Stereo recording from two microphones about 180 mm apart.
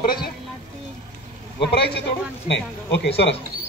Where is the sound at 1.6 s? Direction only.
65° left (ahead or behind).